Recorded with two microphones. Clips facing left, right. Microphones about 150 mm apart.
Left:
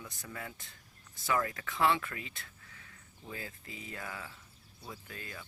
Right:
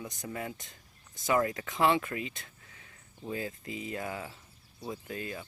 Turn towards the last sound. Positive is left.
turn(degrees=-20)  # may be behind; listen again after turning